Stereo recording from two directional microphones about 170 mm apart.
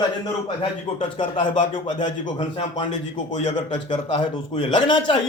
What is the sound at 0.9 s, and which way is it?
Speech, 30° left (ahead or behind).